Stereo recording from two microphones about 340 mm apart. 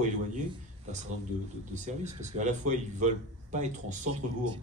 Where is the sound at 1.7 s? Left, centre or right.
Centre.